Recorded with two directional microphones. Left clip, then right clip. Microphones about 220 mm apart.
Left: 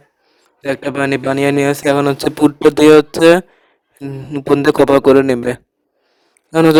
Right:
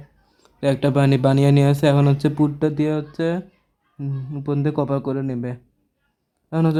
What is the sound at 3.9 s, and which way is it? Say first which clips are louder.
Speech: left 9 dB; 35° left (ahead or behind).